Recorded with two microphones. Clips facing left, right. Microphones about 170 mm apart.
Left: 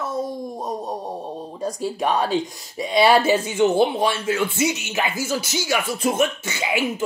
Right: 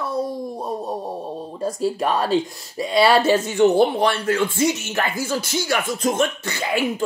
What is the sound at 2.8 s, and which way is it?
Speech, 20° left (ahead or behind).